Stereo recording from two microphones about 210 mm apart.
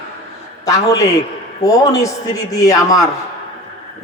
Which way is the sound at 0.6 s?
15° left (ahead or behind).